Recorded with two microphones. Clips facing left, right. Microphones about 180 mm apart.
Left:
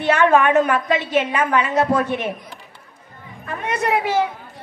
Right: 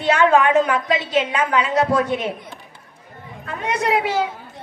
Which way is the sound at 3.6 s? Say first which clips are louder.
Right 1 dB; 15° right (ahead or behind).